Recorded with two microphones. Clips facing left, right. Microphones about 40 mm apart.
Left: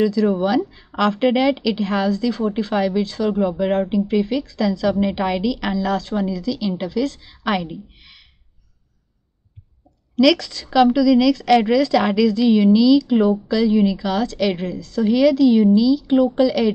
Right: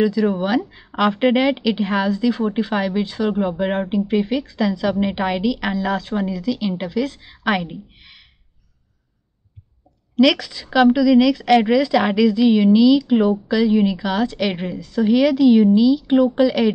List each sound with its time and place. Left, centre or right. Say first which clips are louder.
0.0 s a woman's voice: left 1 dB; centre
10.1 s speech: even; centre